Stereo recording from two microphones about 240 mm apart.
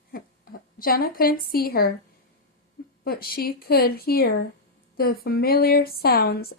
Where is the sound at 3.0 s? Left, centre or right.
Left.